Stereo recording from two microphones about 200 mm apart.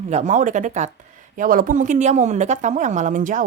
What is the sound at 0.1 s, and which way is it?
A woman's voice, 40° right (ahead or behind).